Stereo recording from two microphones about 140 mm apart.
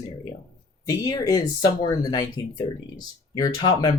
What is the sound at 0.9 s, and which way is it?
Speech, 25° left (ahead or behind).